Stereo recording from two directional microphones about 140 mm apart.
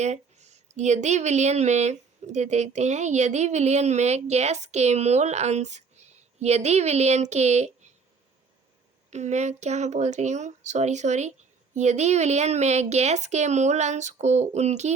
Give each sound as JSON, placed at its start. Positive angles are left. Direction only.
{"t": 0.0, "sound": "speech", "side_deg": -55}
{"t": 9.0, "sound": "speech", "side_deg": -55}